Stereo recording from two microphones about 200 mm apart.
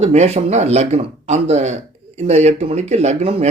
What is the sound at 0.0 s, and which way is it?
Speech, 30° right (ahead or behind).